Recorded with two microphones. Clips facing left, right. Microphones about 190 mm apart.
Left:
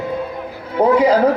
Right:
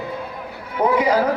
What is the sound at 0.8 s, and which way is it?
Speech, 30° left (ahead or behind).